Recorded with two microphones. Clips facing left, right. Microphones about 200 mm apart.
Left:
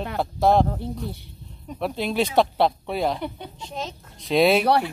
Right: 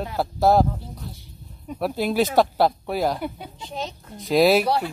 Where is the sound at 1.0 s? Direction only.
65° left (ahead or behind).